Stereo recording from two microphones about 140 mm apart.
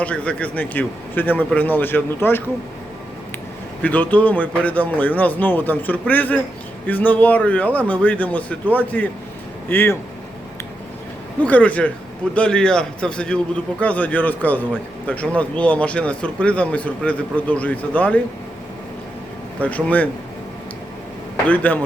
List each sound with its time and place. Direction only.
0.0 s speech: 10° left (ahead or behind)
3.8 s speech: 10° left (ahead or behind)
11.4 s speech: 10° left (ahead or behind)
19.6 s speech: 10° left (ahead or behind)
21.4 s speech: 10° left (ahead or behind)